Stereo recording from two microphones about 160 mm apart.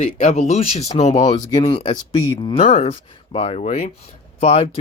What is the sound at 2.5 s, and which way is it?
Speech, 45° left (ahead or behind).